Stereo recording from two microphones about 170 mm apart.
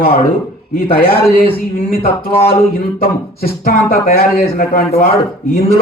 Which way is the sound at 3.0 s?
60° left (ahead or behind).